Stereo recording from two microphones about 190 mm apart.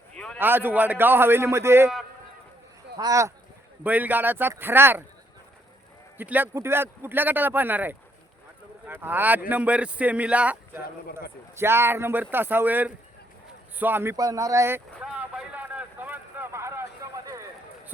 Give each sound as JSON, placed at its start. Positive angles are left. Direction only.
{"t": 0.3, "sound": "speech", "side_deg": -10}
{"t": 2.9, "sound": "speech", "side_deg": -20}
{"t": 6.1, "sound": "speech", "side_deg": -10}
{"t": 15.0, "sound": "a sound", "side_deg": -5}